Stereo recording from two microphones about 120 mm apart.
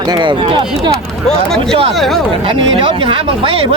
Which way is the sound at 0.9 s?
5° left (ahead or behind).